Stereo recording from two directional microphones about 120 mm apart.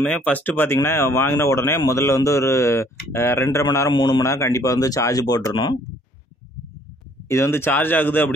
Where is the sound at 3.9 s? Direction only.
40° left (ahead or behind).